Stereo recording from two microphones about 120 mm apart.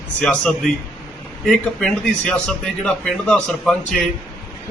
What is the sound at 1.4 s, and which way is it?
A man's voice, 5° left (ahead or behind).